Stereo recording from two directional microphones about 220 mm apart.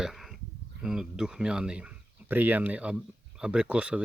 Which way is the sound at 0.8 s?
5° right (ahead or behind).